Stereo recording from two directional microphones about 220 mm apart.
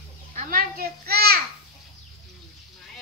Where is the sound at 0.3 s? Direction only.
35° right (ahead or behind).